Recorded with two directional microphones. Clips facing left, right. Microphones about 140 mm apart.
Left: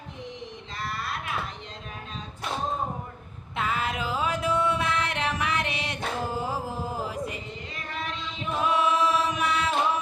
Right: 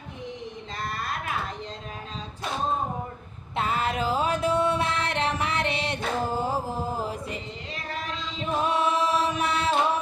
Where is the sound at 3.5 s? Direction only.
35° right (ahead or behind).